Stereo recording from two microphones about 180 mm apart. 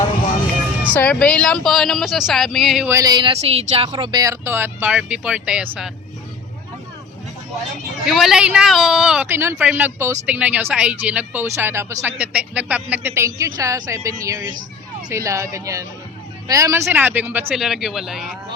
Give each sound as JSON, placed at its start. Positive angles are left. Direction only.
{"t": 0.9, "sound": "speech", "side_deg": 5}
{"t": 2.9, "sound": "speech", "side_deg": -20}
{"t": 8.0, "sound": "speech", "side_deg": 0}